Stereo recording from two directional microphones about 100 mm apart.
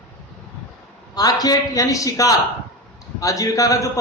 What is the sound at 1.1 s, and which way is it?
A man's voice, 40° left (ahead or behind).